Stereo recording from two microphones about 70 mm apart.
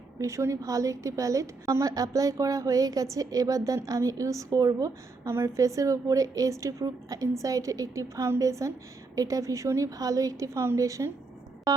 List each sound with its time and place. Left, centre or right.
0.2 s a woman's voice: right